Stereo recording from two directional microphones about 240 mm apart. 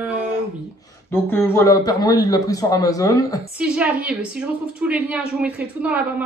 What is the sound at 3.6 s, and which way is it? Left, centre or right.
A woman's voice, centre.